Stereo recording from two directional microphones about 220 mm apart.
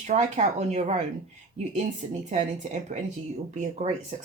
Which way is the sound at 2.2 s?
35° right (ahead or behind).